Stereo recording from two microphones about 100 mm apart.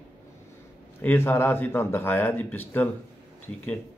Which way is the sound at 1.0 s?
20° left (ahead or behind).